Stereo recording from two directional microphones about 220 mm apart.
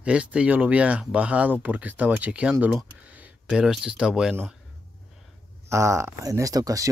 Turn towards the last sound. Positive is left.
turn(degrees=-15)  # may be behind; listen again after turning